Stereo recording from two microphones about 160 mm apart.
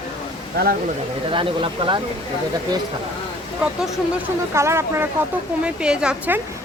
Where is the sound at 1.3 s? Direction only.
35° right (ahead or behind).